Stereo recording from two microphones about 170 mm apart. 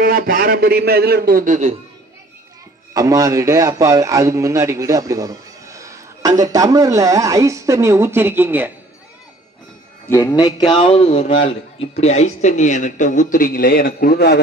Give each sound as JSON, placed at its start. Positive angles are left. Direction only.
{"t": 0.0, "sound": "a man's voice", "side_deg": -55}
{"t": 2.9, "sound": "speech", "side_deg": -20}
{"t": 10.0, "sound": "speech", "side_deg": 15}
{"t": 10.3, "sound": "a man's voice", "side_deg": 25}